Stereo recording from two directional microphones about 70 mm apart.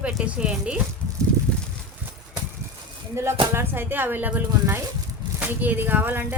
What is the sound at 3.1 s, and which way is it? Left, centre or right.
Speech, right.